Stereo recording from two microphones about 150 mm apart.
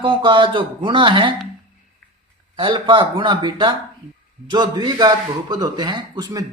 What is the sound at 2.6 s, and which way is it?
Speech, 35° right (ahead or behind).